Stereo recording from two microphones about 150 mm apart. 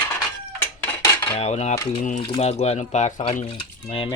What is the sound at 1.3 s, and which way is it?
Speech, 45° left (ahead or behind).